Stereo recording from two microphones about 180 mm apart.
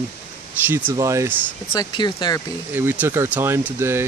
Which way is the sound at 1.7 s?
25° left (ahead or behind).